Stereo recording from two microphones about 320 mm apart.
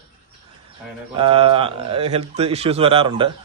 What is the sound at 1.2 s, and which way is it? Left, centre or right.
A man's voice, centre.